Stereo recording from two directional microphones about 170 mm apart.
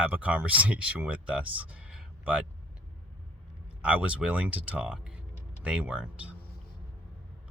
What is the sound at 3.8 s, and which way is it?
Speech, 5° right (ahead or behind).